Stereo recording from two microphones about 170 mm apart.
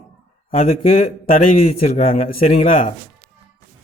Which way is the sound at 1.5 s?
45° left (ahead or behind).